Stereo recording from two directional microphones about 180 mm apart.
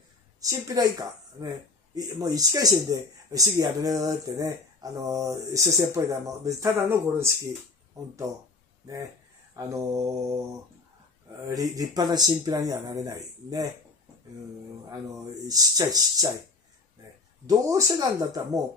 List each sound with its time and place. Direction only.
0.4 s speech: 20° right (ahead or behind)
8.3 s mantra: 15° right (ahead or behind)
9.6 s mantra: 15° right (ahead or behind)
11.4 s speech: 20° right (ahead or behind)
15.3 s speech: 20° right (ahead or behind)
17.5 s speech: 15° right (ahead or behind)